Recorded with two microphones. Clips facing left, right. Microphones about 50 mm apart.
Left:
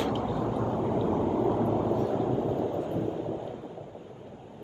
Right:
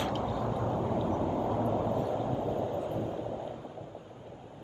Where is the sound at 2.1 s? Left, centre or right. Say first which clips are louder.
Left 4 dB; left.